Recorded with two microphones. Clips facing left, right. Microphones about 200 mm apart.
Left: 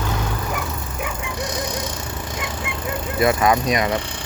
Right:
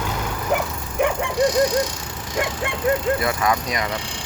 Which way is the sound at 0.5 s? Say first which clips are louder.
Right 6 dB; 60° right (ahead or behind).